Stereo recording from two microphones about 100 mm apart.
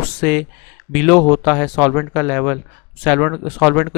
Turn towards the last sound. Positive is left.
turn(degrees=10)  # may be behind; listen again after turning